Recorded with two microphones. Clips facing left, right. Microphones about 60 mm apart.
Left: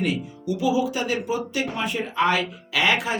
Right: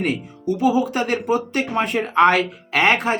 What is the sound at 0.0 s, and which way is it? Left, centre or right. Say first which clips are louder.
Speech: right 3 dB; right.